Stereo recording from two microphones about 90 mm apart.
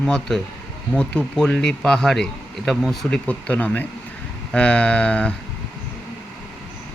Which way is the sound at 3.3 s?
15° left (ahead or behind).